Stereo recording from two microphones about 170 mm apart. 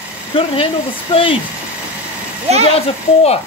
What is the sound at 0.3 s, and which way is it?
Speech, 30° left (ahead or behind).